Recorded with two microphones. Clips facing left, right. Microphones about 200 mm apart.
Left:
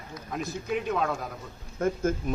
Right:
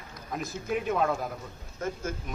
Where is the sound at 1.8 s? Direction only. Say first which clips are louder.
Left 6 dB; 55° left (ahead or behind).